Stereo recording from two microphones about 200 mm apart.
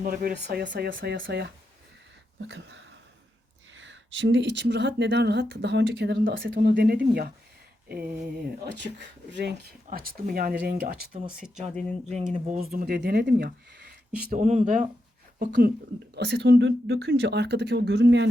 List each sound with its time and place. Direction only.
0.0 s speech: 45° right (ahead or behind)
0.9 s speech: 45° right (ahead or behind)
1.2 s speech: 55° right (ahead or behind)
8.6 s speech: 60° right (ahead or behind)
9.8 s speech: 45° right (ahead or behind)
11.7 s speech: 5° left (ahead or behind)
12.3 s speech: 35° right (ahead or behind)
12.7 s speech: 50° right (ahead or behind)
14.3 s speech: 35° right (ahead or behind)
15.4 s speech: 55° right (ahead or behind)